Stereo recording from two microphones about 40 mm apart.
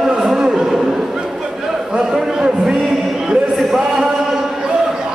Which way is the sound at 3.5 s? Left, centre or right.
Centre.